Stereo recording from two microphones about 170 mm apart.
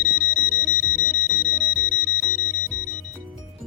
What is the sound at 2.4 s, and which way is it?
Music, 50° left (ahead or behind).